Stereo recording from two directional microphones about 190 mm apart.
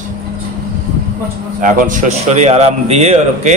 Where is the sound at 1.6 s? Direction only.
45° right (ahead or behind).